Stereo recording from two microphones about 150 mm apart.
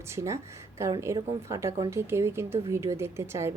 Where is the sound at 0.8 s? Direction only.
20° right (ahead or behind).